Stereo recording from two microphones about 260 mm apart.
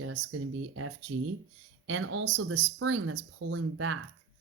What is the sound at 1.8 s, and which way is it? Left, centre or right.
Speech, right.